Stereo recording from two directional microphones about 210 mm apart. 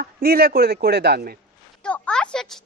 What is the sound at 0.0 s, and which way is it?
A man's voice, 45° right (ahead or behind).